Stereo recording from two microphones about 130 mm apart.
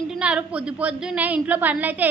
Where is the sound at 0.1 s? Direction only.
10° right (ahead or behind).